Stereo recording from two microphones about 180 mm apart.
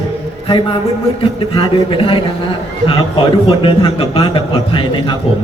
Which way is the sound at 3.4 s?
30° left (ahead or behind).